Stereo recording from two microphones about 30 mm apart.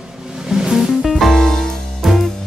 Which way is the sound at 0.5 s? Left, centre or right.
Centre.